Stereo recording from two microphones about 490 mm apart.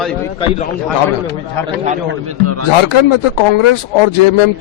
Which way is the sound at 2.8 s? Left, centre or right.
Left.